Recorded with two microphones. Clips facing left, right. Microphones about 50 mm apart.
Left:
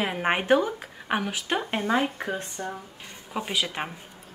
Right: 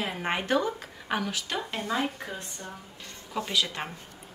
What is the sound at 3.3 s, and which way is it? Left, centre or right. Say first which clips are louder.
Speech: left 1 dB; centre.